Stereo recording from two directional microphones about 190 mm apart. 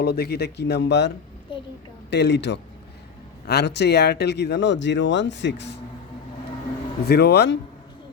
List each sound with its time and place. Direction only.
0.0 s speech: 55° left (ahead or behind)
7.1 s speech: 60° left (ahead or behind)